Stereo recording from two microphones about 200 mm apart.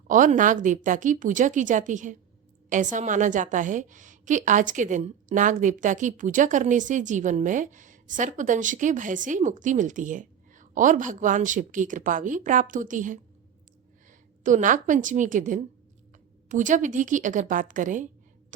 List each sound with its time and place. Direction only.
0.1 s a woman's voice: 40° right (ahead or behind)
14.4 s a woman's voice: 40° right (ahead or behind)